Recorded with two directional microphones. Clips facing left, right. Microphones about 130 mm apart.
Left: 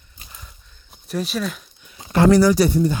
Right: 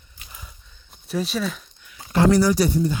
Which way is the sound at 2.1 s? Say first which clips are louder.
Left 3 dB; 65° left (ahead or behind).